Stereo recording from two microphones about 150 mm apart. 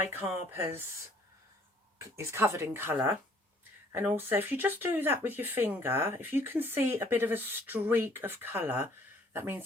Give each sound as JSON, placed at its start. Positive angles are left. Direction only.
{"t": 0.0, "sound": "speech", "side_deg": -15}
{"t": 2.0, "sound": "speech", "side_deg": -15}